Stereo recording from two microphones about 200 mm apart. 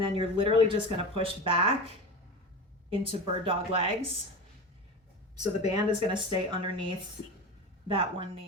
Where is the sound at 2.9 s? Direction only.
25° right (ahead or behind).